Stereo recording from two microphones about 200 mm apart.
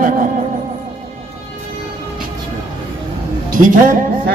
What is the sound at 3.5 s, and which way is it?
Speech, 45° right (ahead or behind).